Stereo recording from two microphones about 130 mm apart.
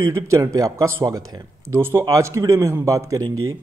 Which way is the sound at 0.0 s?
20° right (ahead or behind).